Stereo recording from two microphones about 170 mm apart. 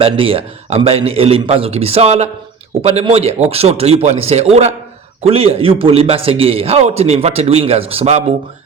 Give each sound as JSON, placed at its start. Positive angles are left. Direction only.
{"t": 0.0, "sound": "a man's voice", "side_deg": -35}